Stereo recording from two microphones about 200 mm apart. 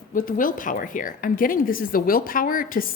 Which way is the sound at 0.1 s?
45° left (ahead or behind).